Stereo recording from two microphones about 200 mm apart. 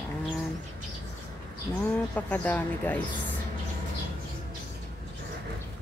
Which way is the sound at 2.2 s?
10° left (ahead or behind).